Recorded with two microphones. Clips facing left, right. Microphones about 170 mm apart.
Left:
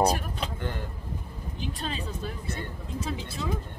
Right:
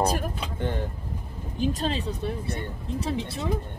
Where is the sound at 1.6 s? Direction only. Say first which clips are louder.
Right 8 dB; 40° right (ahead or behind).